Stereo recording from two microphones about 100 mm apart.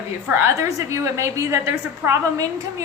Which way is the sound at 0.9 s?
30° right (ahead or behind).